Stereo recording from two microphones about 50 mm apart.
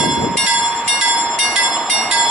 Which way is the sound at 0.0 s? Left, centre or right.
Centre.